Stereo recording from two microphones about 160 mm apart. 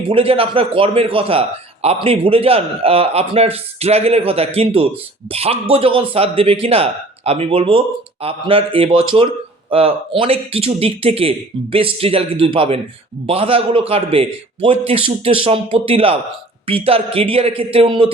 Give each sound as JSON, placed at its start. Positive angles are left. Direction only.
{"t": 0.1, "sound": "a man's voice", "side_deg": -35}